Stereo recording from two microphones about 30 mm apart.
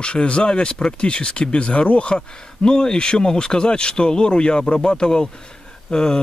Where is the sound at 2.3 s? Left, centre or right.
Left.